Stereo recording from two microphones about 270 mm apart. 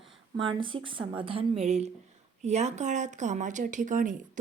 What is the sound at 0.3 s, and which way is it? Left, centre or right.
Speech, centre.